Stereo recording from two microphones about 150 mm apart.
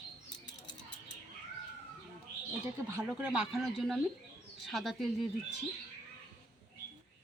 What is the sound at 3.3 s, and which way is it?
Speech, 5° right (ahead or behind).